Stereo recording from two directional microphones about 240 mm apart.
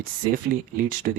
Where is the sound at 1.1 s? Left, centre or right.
Right.